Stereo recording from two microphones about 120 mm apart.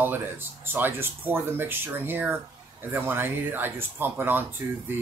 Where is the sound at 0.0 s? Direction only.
15° right (ahead or behind).